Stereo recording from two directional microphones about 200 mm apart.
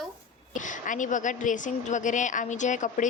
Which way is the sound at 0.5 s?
40° left (ahead or behind).